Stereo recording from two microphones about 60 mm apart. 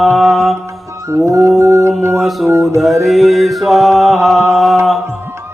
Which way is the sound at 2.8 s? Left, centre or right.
Centre.